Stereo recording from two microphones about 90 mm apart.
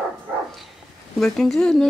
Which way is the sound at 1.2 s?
5° left (ahead or behind).